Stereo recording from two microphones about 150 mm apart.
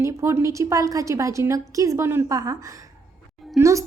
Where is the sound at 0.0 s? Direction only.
20° right (ahead or behind).